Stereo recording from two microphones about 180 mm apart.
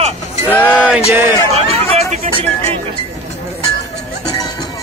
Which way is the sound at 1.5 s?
35° right (ahead or behind).